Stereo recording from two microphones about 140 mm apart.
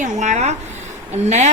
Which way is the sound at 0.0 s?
55° right (ahead or behind).